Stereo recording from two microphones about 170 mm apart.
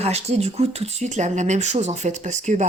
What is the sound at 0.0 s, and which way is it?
Speech, 40° right (ahead or behind).